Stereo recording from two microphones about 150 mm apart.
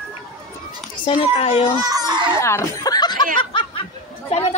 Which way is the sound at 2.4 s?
20° left (ahead or behind).